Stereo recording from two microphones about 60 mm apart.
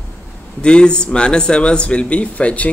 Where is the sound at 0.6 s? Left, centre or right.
Centre.